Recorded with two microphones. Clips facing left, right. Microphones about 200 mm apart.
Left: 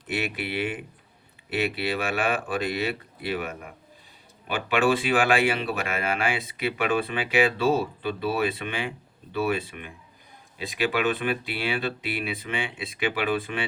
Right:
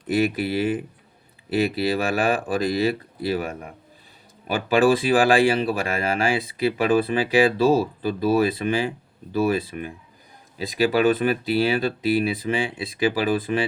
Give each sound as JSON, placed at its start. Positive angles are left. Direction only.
{"t": 0.1, "sound": "speech", "side_deg": -40}